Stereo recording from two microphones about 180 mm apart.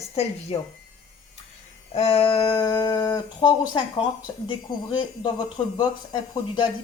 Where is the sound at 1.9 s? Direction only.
30° left (ahead or behind).